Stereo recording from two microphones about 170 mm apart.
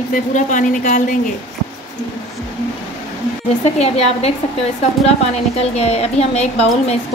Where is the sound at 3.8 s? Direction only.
40° left (ahead or behind).